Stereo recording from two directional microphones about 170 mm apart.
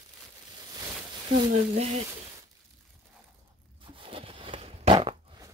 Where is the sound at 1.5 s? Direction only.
45° right (ahead or behind).